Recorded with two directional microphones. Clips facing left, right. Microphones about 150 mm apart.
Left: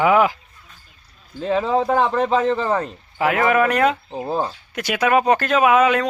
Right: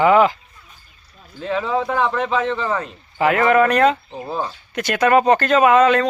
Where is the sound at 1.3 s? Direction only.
35° left (ahead or behind).